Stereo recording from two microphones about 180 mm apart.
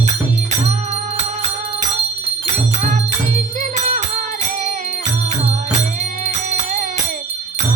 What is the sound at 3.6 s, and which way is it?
Music, 45° right (ahead or behind).